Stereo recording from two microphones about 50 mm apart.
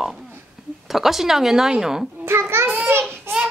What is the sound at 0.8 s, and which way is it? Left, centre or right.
Speech, centre.